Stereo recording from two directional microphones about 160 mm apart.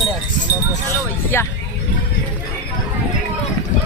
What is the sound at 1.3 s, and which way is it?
Speech, 15° left (ahead or behind).